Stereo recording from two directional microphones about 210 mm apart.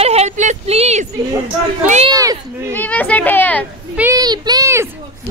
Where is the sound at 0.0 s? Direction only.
30° right (ahead or behind).